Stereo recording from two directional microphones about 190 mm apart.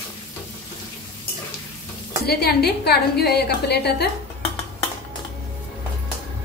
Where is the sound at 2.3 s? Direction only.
55° left (ahead or behind).